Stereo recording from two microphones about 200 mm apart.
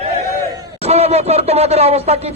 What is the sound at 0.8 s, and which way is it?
A man's voice, 30° right (ahead or behind).